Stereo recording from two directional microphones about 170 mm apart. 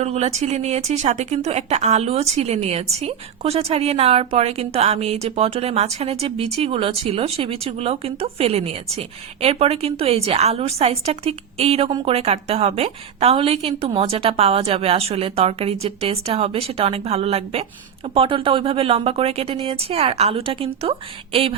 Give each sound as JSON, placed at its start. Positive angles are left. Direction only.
{"t": 0.0, "sound": "a woman's voice", "side_deg": -40}